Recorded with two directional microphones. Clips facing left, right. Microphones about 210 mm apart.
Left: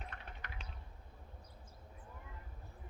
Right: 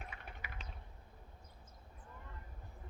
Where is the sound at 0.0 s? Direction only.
10° right (ahead or behind).